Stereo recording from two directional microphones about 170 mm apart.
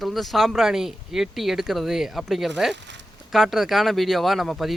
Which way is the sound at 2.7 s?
90° right.